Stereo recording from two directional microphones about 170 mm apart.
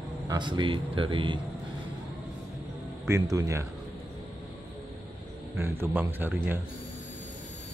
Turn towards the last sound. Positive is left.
turn(degrees=-10)  # may be behind; listen again after turning